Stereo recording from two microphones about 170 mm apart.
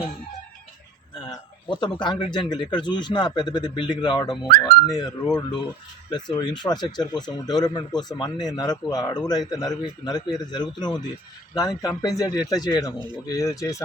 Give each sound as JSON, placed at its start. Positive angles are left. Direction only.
{"t": 1.2, "sound": "a man's voice", "side_deg": 25}